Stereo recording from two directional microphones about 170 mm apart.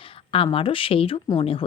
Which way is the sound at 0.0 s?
35° left (ahead or behind).